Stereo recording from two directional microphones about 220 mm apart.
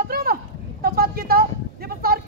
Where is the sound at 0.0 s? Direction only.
40° right (ahead or behind).